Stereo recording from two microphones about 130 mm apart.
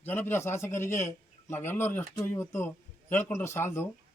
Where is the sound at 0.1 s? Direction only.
15° left (ahead or behind).